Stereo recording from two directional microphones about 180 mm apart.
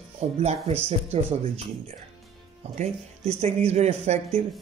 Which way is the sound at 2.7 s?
40° right (ahead or behind).